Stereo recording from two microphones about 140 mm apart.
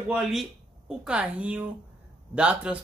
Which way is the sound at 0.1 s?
Centre (ahead or behind).